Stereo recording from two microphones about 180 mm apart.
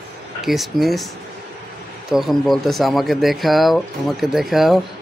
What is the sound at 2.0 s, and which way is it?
Speech, centre (ahead or behind).